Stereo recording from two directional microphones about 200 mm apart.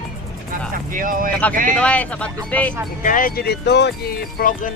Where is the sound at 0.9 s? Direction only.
45° right (ahead or behind).